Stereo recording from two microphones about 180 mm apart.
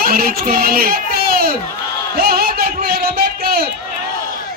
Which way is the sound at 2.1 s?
60° right (ahead or behind).